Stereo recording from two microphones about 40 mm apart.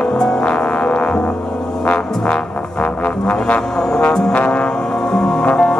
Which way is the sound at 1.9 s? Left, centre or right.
Left.